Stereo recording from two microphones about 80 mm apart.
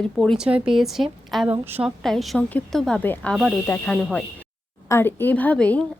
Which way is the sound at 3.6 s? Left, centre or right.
Centre.